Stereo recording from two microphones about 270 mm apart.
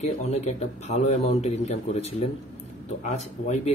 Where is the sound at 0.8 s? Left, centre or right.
Left.